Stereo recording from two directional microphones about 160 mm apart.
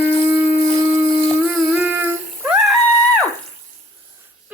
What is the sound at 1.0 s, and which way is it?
Humming, 10° right (ahead or behind).